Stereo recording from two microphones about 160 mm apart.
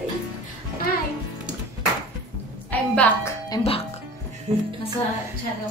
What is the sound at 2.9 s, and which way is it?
Speech, 10° left (ahead or behind).